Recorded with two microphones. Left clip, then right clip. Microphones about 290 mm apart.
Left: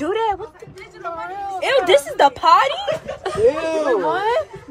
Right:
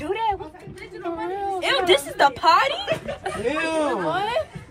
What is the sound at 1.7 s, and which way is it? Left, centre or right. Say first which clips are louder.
Snicker: left 6 dB; left.